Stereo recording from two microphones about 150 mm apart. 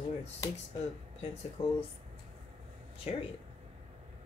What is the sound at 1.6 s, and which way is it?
Speech, 35° left (ahead or behind).